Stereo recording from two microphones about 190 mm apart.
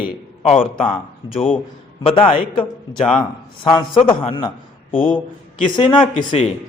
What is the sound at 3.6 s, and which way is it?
A man's voice, 25° left (ahead or behind).